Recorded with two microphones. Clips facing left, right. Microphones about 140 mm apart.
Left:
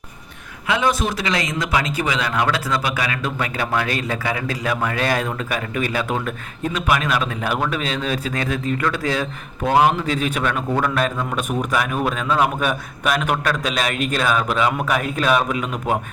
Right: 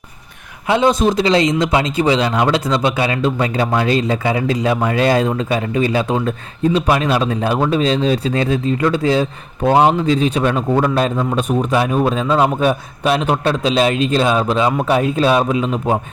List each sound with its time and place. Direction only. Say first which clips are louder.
0.7 s a man's voice: right 6 dB; 25° right (ahead or behind)